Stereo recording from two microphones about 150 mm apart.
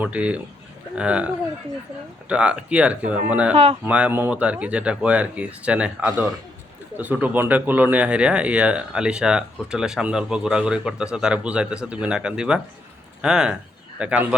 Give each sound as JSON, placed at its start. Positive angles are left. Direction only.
{"t": 0.0, "sound": "speech", "side_deg": -10}
{"t": 2.3, "sound": "speech", "side_deg": -5}
{"t": 3.5, "sound": "speech", "side_deg": -40}
{"t": 3.8, "sound": "speech", "side_deg": -10}